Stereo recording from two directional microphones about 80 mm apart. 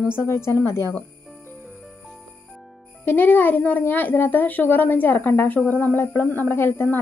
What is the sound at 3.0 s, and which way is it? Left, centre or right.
A child's voice, left.